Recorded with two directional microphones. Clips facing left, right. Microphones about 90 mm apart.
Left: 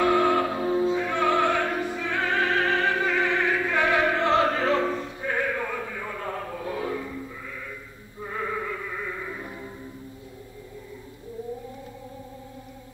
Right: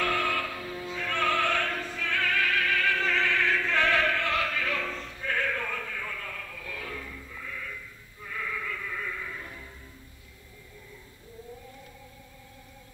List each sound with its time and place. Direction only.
0.0 s opera: 20° left (ahead or behind)
8.2 s music: 35° left (ahead or behind)